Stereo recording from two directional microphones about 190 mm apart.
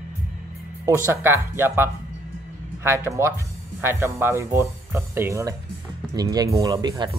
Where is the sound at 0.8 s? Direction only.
15° right (ahead or behind).